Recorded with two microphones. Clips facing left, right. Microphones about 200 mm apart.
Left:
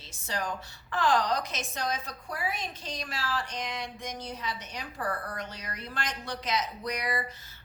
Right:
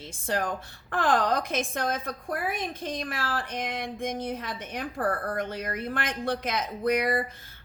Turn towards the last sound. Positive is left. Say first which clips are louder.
# right 6 dB
turn(degrees=-55)  # may be behind; listen again after turning